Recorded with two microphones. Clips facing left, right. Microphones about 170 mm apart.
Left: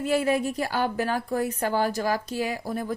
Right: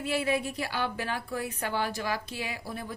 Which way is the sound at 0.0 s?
45° left (ahead or behind).